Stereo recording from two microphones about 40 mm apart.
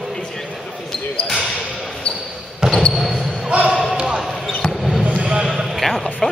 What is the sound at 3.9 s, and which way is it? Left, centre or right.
Basketball bounce, centre.